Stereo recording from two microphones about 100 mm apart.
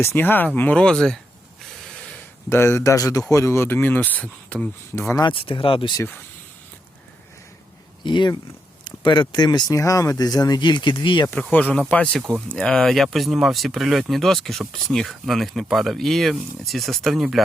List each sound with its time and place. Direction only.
0.0 s speech: 25° left (ahead or behind); by 1.2 s 5° left (ahead or behind)
2.5 s speech: 25° left (ahead or behind)
4.4 s a sound: 10° left (ahead or behind)
4.9 s speech: 25° left (ahead or behind)
5.2 s speech: 65° left (ahead or behind)
8.0 s speech: 50° left (ahead or behind)
9.7 s speech: 35° left (ahead or behind); by 11.3 s 55° left (ahead or behind)
11.5 s speech: 15° left (ahead or behind); by 17.4 s centre (ahead or behind)